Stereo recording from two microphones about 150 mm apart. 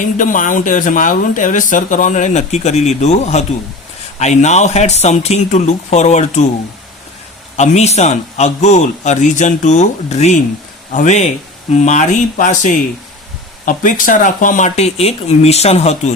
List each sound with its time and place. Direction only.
0.0 s speech: 60° left (ahead or behind)
7.5 s speech: 50° left (ahead or behind)